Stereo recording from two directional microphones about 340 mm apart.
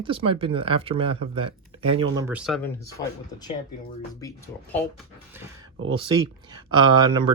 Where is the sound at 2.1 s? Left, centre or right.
Centre.